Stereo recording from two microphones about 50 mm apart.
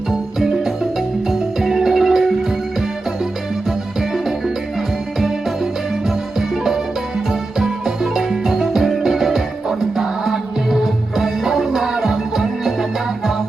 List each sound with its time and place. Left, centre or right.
0.3 s music: centre
7.6 s music: centre